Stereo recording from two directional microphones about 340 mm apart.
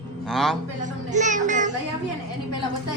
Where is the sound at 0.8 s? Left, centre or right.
Right.